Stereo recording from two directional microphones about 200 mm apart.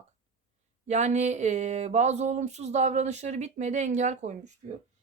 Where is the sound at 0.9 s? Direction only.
35° right (ahead or behind).